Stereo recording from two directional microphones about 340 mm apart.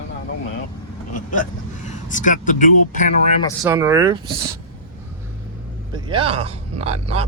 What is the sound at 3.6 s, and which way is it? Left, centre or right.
Speech, centre.